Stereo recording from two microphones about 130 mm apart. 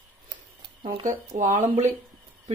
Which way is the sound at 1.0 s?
75° right (ahead or behind).